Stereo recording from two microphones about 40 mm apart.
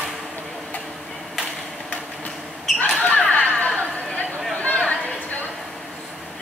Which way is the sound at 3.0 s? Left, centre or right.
Left.